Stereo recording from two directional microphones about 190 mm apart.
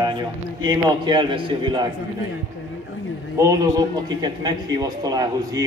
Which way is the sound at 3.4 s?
15° right (ahead or behind).